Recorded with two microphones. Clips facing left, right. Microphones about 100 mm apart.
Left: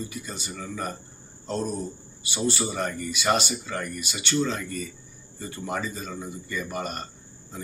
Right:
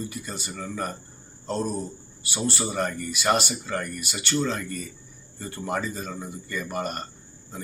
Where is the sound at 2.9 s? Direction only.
15° left (ahead or behind).